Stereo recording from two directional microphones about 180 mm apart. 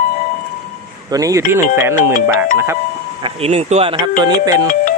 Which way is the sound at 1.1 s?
20° right (ahead or behind).